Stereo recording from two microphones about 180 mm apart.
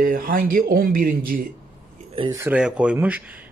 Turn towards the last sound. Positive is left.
turn(degrees=-10)  # may be behind; listen again after turning